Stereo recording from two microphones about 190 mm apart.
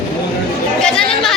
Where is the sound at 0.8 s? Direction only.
5° left (ahead or behind).